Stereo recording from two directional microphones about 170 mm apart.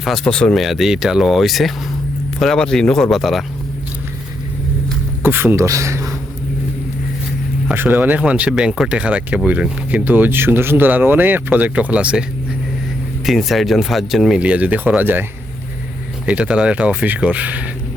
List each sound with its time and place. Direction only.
0.0 s speech: 5° left (ahead or behind)
5.2 s speech: 15° right (ahead or behind)
7.7 s speech: 10° right (ahead or behind)
13.2 s speech: centre (ahead or behind)